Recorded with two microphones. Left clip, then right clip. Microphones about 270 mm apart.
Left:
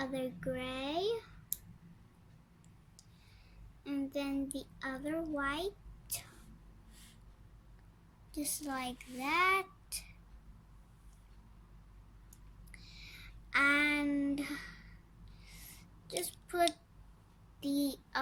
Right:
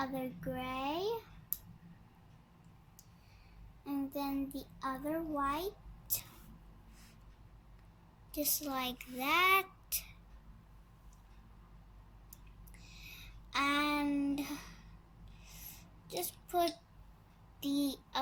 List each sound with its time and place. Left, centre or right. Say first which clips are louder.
0.1 s a sound: left 2 dB; left
3.8 s child singing: left 1 dB; left
4.5 s a child's voice: right 1 dB; left
8.3 s a child's voice: right 2 dB; left
12.9 s a sound: right 1 dB; left
16.0 s child singing: left 1 dB; left
17.6 s a child's voice: even; left